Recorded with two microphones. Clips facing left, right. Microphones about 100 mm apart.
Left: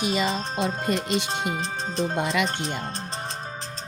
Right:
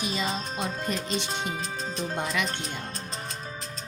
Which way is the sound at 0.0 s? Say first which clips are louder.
Left 6 dB; 65° left (ahead or behind).